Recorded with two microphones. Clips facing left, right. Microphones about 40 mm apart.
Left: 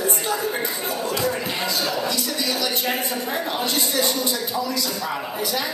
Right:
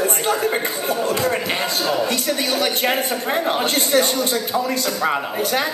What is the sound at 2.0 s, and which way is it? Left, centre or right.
Speech, right.